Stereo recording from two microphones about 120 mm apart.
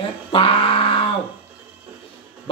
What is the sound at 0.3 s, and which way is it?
Wail, 50° left (ahead or behind).